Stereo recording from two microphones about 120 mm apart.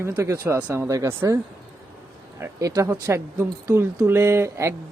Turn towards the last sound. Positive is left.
turn(degrees=-25)  # may be behind; listen again after turning